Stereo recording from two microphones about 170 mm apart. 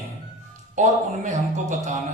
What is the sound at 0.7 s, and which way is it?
A man's voice, 45° right (ahead or behind).